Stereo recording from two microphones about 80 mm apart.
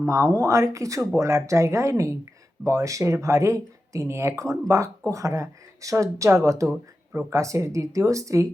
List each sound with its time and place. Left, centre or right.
0.0 s speech: right
7.1 s speech: right
7.3 s speech: right